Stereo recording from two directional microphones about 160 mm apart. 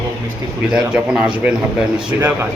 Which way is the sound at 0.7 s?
5° right (ahead or behind).